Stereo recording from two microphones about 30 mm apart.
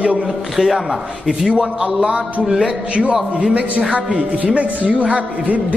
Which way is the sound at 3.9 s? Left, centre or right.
Right.